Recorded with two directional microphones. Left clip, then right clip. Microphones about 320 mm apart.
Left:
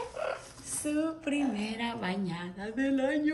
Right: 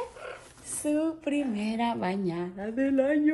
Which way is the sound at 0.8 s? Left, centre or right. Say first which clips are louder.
Right 4 dB; centre.